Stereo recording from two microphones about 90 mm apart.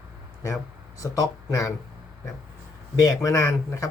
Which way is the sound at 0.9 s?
40° left (ahead or behind).